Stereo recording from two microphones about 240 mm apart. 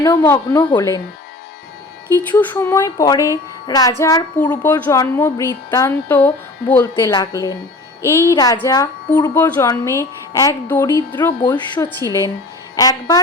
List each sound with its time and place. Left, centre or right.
0.0 s speech: centre
2.1 s speech: centre